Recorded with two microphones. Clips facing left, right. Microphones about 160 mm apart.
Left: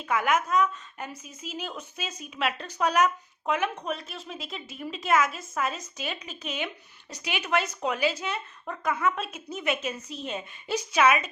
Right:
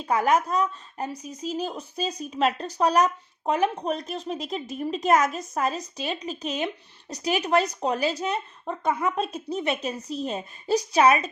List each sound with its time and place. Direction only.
0.0 s speech: 35° right (ahead or behind)
8.6 s speech: 25° right (ahead or behind)